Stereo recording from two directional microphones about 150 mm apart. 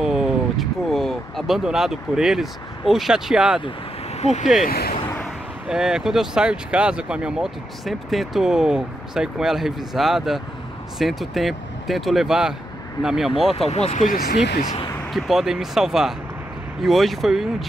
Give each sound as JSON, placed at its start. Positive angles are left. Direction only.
{"t": 0.0, "sound": "speech", "side_deg": -5}
{"t": 4.2, "sound": "speech", "side_deg": 45}
{"t": 4.6, "sound": "speech", "side_deg": 90}
{"t": 5.7, "sound": "speech", "side_deg": -5}
{"t": 13.7, "sound": "speech", "side_deg": 45}
{"t": 14.0, "sound": "speech", "side_deg": 80}
{"t": 15.1, "sound": "speech", "side_deg": 0}